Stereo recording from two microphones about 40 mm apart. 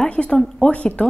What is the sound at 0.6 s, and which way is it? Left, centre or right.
Speech, left.